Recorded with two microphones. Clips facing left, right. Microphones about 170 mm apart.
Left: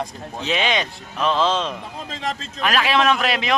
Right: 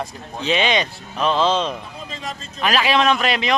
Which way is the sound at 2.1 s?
90° left.